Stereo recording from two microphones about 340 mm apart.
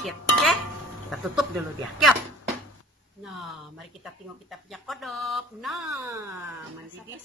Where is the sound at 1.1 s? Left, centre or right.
Centre.